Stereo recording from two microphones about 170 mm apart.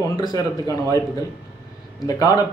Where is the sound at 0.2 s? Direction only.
20° left (ahead or behind).